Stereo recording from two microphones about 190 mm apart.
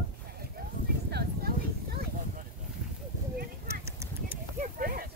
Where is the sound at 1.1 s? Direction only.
55° right (ahead or behind).